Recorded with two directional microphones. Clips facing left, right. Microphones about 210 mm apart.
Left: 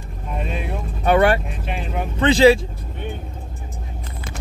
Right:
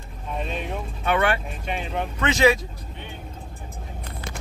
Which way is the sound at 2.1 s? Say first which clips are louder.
Left 7 dB; 30° left (ahead or behind).